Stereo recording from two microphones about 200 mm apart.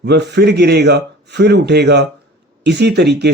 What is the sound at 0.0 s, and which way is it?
Speech, 55° right (ahead or behind).